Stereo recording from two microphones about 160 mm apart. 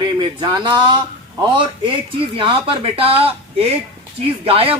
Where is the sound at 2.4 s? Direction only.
30° right (ahead or behind).